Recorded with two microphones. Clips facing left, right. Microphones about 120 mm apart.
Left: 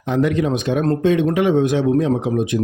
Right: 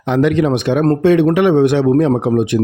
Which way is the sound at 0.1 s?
80° right.